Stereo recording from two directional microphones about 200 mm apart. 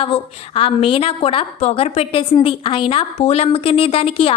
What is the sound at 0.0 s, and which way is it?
A woman's voice, 30° left (ahead or behind).